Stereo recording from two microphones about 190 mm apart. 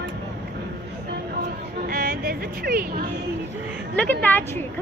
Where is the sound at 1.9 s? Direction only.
50° right (ahead or behind).